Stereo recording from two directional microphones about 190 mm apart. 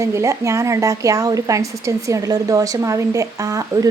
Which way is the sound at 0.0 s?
15° right (ahead or behind).